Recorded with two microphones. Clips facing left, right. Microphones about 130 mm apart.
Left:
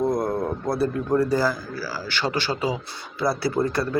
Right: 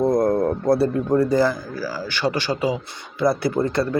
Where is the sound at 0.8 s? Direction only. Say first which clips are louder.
Right 3 dB; 25° right (ahead or behind).